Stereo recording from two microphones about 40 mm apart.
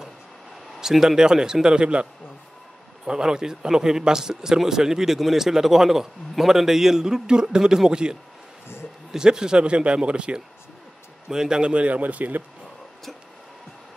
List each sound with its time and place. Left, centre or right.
0.7 s a man's voice: centre
3.1 s a man's voice: centre
11.7 s a man's voice: right
12.0 s speech: right